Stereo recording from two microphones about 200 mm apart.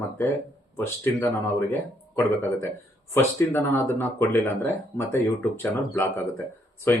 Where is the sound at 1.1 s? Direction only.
10° left (ahead or behind).